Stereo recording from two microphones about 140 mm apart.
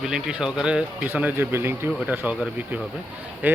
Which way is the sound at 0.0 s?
5° right (ahead or behind).